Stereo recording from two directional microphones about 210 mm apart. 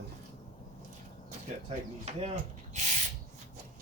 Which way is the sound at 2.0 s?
30° right (ahead or behind).